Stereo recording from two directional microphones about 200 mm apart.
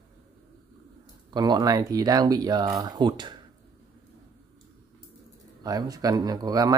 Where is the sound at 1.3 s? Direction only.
20° right (ahead or behind).